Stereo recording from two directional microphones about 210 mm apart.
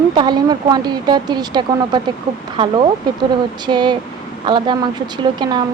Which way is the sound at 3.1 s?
20° right (ahead or behind).